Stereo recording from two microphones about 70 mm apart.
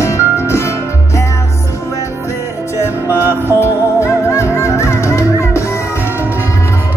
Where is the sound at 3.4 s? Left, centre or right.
Left.